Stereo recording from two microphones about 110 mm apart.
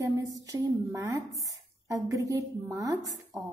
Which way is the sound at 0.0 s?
30° right (ahead or behind).